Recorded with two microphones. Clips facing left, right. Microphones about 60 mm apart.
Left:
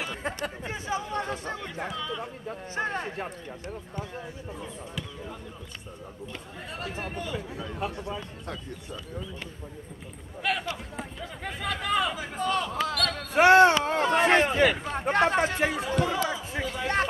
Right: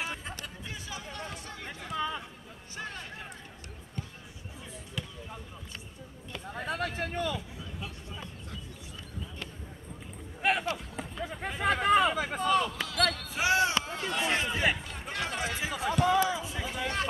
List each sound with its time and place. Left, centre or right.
0.0 s a sound: left
0.7 s chatter: left
2.7 s a sound: left
6.5 s speech: right
7.3 s speech: left
10.4 s speech: right
11.6 s speech: right
12.4 s speech: centre
12.7 s basketball bounce: left
13.3 s a sound: left